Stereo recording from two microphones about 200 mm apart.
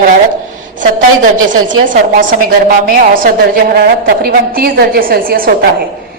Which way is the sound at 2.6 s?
45° right (ahead or behind).